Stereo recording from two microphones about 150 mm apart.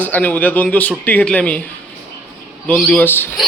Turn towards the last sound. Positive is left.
turn(degrees=15)  # may be behind; listen again after turning